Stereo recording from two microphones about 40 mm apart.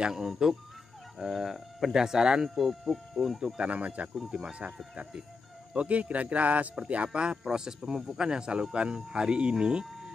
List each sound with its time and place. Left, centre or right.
0.1 s speech: centre
2.0 s speech: centre
2.5 s speech: centre
3.5 s a man's voice: right
4.3 s speech: right
5.8 s a man's voice: right
7.1 s speech: right